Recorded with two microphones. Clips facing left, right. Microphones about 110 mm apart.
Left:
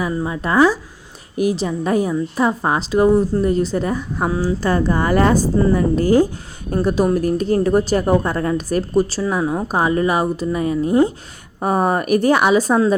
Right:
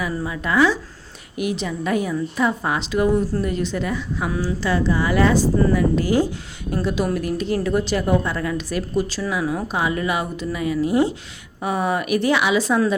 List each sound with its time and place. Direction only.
0.0 s a woman's voice: 30° left (ahead or behind)
4.3 s a woman's voice: 25° left (ahead or behind)
4.6 s a woman's voice: 45° left (ahead or behind)
9.4 s a woman's voice: 30° left (ahead or behind)
9.6 s a woman's voice: 40° left (ahead or behind)
11.6 s a woman's voice: 45° left (ahead or behind)